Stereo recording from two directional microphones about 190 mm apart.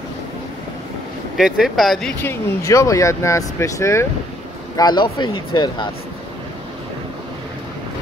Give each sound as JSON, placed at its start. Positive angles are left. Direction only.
{"t": 1.3, "sound": "speech", "side_deg": 0}
{"t": 2.6, "sound": "speech", "side_deg": 15}